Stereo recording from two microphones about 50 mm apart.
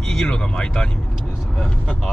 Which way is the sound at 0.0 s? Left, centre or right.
Centre.